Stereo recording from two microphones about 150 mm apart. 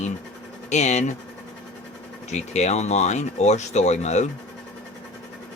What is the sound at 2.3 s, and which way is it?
Speech, 50° left (ahead or behind).